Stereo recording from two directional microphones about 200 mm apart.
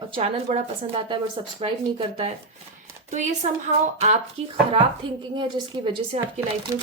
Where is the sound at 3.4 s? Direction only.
30° right (ahead or behind).